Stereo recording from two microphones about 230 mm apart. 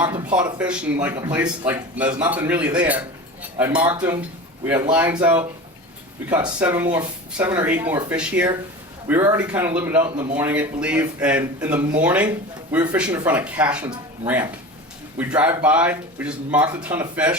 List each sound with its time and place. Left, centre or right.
0.0 s speech: centre
6.6 s speech: centre
10.1 s speech: right
10.3 s speech: centre